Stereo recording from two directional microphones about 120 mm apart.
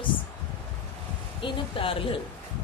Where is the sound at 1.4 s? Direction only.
45° left (ahead or behind).